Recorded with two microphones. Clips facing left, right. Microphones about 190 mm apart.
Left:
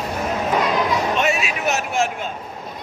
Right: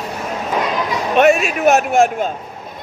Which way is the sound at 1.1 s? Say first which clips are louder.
Right 8 dB; 55° right (ahead or behind).